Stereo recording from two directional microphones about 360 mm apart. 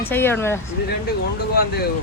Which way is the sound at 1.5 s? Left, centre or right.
Left.